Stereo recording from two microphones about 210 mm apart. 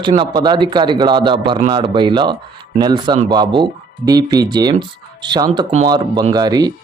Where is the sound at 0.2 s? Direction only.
20° right (ahead or behind).